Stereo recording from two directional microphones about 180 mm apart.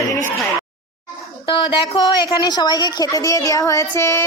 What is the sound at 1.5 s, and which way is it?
A woman's voice, 30° left (ahead or behind).